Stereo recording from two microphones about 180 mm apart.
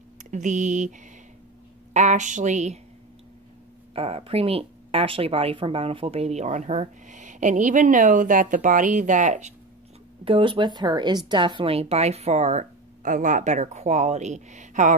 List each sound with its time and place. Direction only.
0.2 s speech: 45° right (ahead or behind)
2.0 s speech: 40° right (ahead or behind)
3.9 s speech: 35° right (ahead or behind)
10.2 s speech: 30° right (ahead or behind); by 15.0 s 45° right (ahead or behind)